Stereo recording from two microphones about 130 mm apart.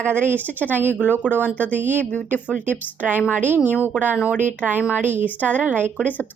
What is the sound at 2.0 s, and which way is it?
Speech, 10° left (ahead or behind).